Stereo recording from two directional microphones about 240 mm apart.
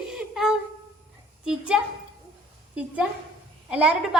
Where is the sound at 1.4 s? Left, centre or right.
Centre.